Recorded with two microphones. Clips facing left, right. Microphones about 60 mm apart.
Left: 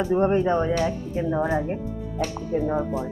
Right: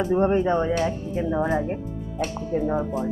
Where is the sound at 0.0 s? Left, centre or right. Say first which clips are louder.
Even; centre.